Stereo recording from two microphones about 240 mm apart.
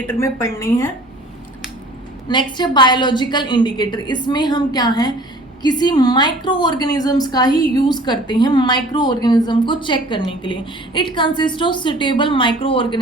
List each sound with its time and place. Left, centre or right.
0.1 s a woman's voice: centre
2.2 s a woman's voice: centre